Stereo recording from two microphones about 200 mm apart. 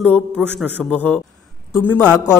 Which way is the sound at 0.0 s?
5° left (ahead or behind).